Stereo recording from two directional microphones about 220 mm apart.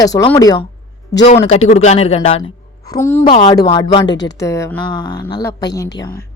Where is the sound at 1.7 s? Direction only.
30° left (ahead or behind); by 3.2 s 10° left (ahead or behind).